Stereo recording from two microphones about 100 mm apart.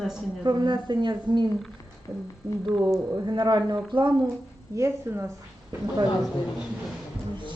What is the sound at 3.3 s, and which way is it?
Speech, 45° right (ahead or behind).